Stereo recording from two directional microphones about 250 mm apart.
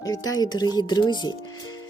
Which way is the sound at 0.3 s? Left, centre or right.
Centre.